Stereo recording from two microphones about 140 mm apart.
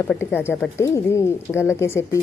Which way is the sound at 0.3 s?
15° left (ahead or behind).